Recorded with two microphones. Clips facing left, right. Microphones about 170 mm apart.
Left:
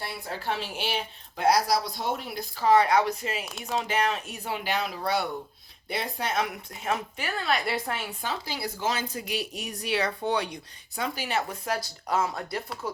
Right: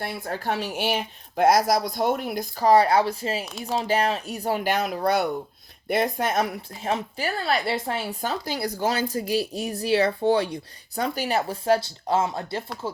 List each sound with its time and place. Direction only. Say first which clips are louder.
0.0 s a woman's voice: right 5 dB; 50° right (ahead or behind)
6.8 s speech: right 4 dB; 35° right (ahead or behind)
8.2 s speech: right 5 dB; 45° right (ahead or behind); by 13.0 s 25° right (ahead or behind)